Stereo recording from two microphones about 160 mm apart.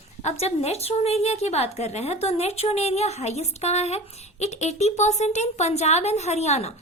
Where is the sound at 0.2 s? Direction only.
45° left (ahead or behind).